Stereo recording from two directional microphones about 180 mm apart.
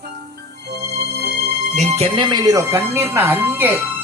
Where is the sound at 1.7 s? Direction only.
35° right (ahead or behind).